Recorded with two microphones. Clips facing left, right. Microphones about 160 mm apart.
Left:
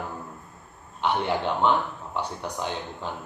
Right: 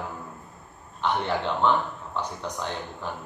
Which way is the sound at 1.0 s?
15° left (ahead or behind).